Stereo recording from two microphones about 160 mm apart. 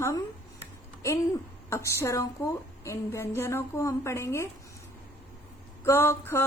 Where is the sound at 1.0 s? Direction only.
15° left (ahead or behind).